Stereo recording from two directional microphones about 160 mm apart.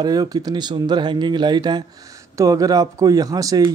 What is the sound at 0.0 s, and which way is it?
Speech, 25° right (ahead or behind).